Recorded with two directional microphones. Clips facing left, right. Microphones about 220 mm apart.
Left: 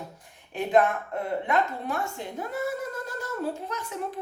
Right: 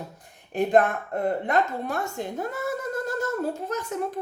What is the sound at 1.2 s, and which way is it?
Speech, 45° right (ahead or behind).